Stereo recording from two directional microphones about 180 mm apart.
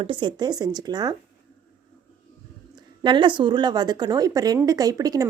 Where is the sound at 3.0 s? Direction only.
25° right (ahead or behind).